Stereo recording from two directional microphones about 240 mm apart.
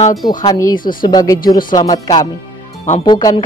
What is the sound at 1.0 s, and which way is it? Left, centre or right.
Speech, centre.